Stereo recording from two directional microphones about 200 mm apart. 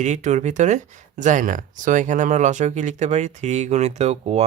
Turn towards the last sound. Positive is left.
turn(degrees=-30)  # may be behind; listen again after turning